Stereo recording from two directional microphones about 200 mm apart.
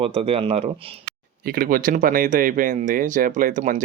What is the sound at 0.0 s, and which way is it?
Speech, 30° right (ahead or behind).